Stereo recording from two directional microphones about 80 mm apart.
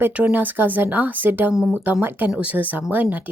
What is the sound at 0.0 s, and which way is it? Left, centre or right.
Speech, centre.